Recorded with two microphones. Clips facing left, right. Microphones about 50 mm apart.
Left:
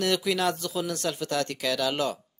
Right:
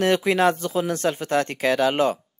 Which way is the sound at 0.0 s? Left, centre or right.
Right.